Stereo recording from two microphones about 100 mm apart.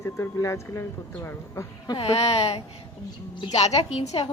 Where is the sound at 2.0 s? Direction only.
75° left (ahead or behind).